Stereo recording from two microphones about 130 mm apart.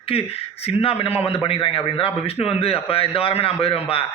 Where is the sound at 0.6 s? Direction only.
45° left (ahead or behind).